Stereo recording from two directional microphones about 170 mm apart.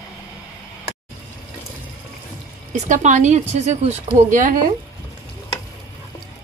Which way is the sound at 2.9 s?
45° right (ahead or behind).